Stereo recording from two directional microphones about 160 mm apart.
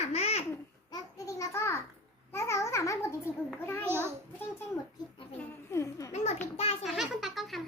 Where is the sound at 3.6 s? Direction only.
15° left (ahead or behind).